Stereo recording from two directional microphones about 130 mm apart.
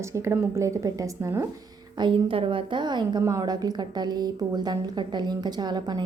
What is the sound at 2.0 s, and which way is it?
A woman's voice, 40° right (ahead or behind).